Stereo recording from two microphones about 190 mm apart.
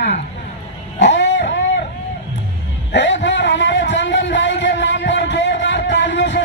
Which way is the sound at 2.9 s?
70° left (ahead or behind).